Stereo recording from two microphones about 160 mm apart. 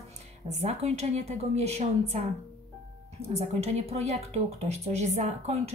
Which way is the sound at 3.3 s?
40° right (ahead or behind).